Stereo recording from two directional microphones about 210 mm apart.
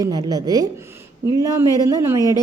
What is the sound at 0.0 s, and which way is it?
A woman's voice, 15° right (ahead or behind).